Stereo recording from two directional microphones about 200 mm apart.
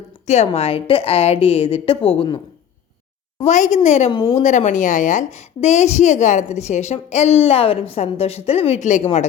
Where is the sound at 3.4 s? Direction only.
35° left (ahead or behind).